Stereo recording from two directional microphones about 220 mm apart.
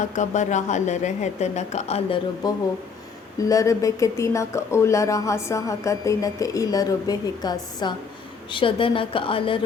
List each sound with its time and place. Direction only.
0.0 s a woman's voice: 35° left (ahead or behind)